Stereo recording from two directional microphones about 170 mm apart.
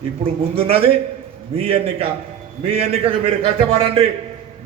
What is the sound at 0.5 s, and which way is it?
A man's voice, 35° right (ahead or behind).